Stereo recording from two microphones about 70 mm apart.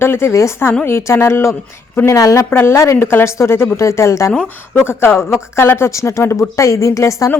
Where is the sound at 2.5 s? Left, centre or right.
Left.